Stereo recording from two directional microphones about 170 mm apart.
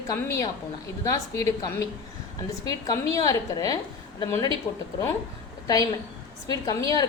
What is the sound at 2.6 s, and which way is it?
A woman's voice, 20° left (ahead or behind).